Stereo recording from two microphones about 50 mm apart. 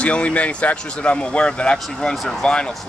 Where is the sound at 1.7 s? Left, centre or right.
Centre.